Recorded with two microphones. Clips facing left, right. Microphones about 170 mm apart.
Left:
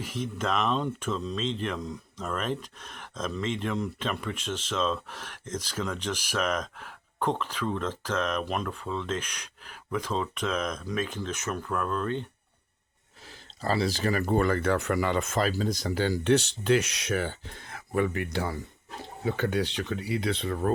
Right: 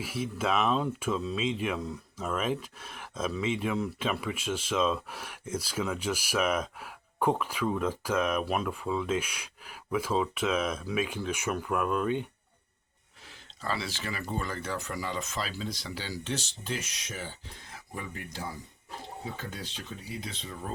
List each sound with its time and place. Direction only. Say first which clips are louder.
0.0 s speech: even; 5° right (ahead or behind)
13.6 s speech: left 7 dB; 40° left (ahead or behind); by 20.7 s 60° left (ahead or behind)